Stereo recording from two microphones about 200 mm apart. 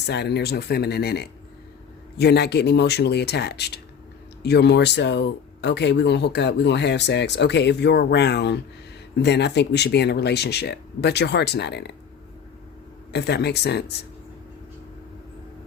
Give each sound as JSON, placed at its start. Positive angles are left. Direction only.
{"t": 0.0, "sound": "speech", "side_deg": 55}
{"t": 13.1, "sound": "speech", "side_deg": 55}